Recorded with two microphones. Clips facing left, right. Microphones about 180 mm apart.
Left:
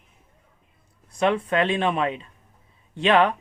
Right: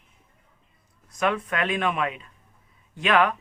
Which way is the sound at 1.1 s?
30° left (ahead or behind).